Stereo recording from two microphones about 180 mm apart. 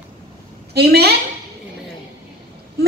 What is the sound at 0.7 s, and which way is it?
Speech, 60° right (ahead or behind).